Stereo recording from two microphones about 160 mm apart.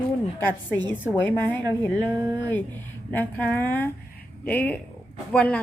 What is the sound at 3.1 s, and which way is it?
A woman's voice, 10° left (ahead or behind).